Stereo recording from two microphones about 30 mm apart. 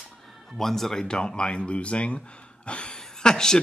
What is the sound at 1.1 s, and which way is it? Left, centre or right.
Speech, left.